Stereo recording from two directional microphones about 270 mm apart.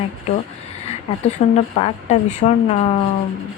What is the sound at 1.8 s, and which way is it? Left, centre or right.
Speech, left.